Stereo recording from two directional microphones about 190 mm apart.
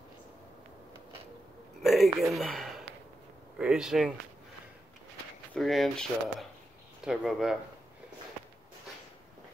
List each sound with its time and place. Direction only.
1.8 s speech: centre (ahead or behind)
5.5 s speech: centre (ahead or behind)